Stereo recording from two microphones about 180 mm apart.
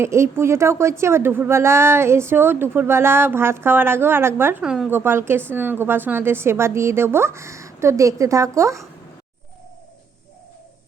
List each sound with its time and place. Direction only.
0.0 s speech: 15° right (ahead or behind)